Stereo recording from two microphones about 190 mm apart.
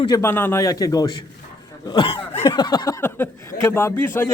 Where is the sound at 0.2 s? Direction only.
10° left (ahead or behind).